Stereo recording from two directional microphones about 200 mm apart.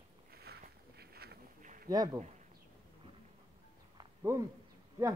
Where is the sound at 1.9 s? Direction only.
20° right (ahead or behind).